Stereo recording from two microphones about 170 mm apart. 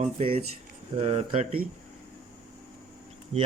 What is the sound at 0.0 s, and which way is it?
Speech, 35° right (ahead or behind).